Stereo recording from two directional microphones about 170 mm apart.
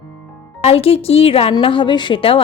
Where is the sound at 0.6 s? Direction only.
35° left (ahead or behind).